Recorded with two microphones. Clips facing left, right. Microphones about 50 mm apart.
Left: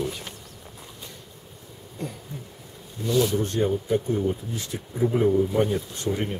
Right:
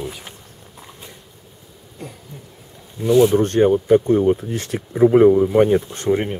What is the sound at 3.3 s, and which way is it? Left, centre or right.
Speech, right.